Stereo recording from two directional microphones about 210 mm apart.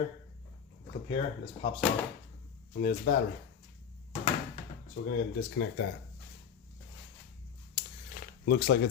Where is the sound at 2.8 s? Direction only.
40° left (ahead or behind).